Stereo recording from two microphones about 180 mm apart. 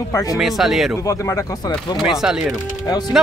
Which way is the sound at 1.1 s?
20° left (ahead or behind).